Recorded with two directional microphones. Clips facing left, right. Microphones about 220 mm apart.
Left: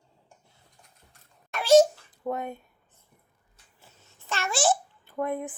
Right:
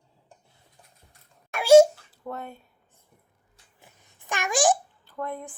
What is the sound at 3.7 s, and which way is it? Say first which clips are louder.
Babbling: even; 15° right (ahead or behind).